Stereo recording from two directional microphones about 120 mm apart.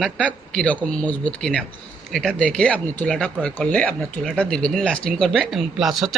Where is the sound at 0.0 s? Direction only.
10° left (ahead or behind).